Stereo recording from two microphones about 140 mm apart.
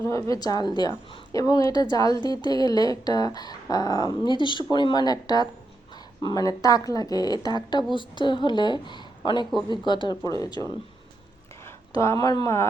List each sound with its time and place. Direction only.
0.0 s a woman's voice: 20° left (ahead or behind)
11.6 s a sound: 20° left (ahead or behind)
12.2 s a woman's voice: 30° left (ahead or behind)